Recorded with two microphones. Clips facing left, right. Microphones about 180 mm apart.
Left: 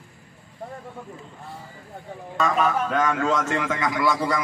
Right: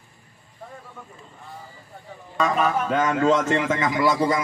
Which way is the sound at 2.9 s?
20° right (ahead or behind).